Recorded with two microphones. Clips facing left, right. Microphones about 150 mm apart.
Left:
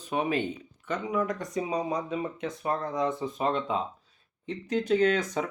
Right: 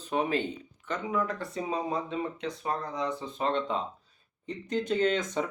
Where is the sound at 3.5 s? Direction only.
10° left (ahead or behind).